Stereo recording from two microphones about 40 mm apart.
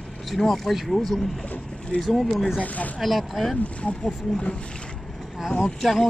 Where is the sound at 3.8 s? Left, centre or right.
Left.